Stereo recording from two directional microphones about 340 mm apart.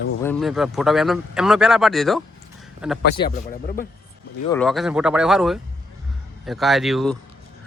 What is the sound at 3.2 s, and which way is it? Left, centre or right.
Speech, left.